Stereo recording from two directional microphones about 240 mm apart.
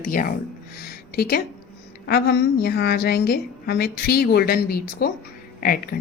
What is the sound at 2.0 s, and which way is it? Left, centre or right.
A woman's voice, left.